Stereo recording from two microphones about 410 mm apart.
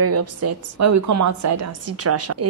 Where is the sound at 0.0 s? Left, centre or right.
Right.